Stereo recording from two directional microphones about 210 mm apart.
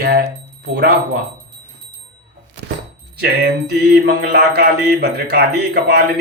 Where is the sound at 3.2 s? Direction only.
50° right (ahead or behind).